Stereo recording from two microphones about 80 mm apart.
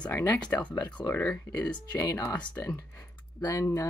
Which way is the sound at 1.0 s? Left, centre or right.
Left.